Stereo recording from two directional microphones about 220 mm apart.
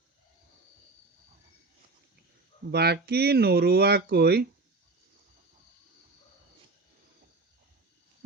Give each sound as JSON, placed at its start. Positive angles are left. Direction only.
{"t": 2.6, "sound": "speech", "side_deg": -45}